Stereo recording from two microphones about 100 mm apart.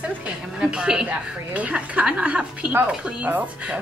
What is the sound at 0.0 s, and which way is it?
A woman's voice, 10° right (ahead or behind).